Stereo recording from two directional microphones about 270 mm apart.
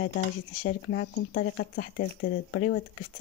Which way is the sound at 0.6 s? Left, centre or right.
Left.